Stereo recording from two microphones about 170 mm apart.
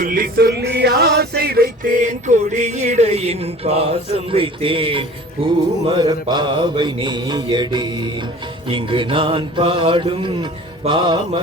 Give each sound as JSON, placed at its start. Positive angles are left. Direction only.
{"t": 0.0, "sound": "male singing", "side_deg": -55}
{"t": 5.8, "sound": "mantra", "side_deg": -25}